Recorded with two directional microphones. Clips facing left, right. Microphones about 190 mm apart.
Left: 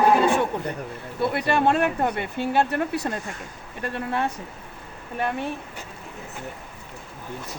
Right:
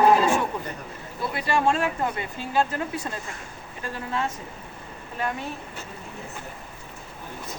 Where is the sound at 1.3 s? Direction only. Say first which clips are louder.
Left 1 dB; 60° left (ahead or behind).